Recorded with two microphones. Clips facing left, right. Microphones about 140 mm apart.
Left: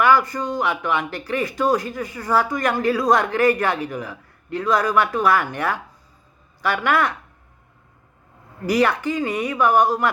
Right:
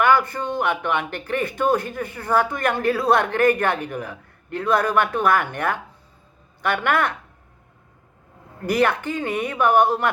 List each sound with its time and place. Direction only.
0.0 s speech: 55° right (ahead or behind)
8.6 s speech: 55° right (ahead or behind)